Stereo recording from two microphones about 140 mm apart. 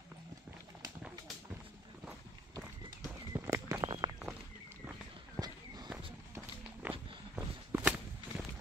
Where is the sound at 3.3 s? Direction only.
20° right (ahead or behind).